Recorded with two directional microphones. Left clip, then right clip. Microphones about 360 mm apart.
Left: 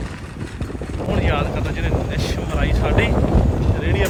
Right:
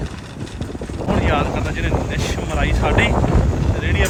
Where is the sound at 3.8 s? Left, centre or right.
Centre.